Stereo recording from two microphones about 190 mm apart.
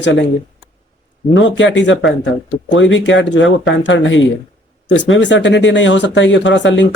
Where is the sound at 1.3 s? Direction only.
75° left (ahead or behind).